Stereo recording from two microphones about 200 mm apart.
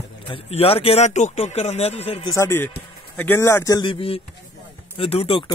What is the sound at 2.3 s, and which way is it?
Speech, 15° left (ahead or behind).